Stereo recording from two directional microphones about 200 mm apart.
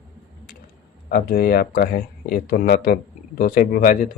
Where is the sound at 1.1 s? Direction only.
50° left (ahead or behind).